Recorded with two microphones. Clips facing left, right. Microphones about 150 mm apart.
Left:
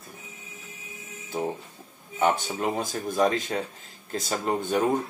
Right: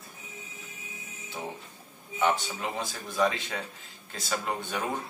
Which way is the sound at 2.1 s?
45° left (ahead or behind).